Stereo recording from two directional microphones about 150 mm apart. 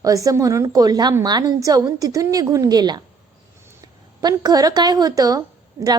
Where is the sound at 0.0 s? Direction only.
20° right (ahead or behind).